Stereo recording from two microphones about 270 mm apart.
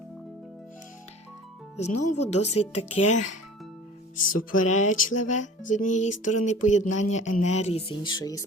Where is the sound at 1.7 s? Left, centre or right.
Left.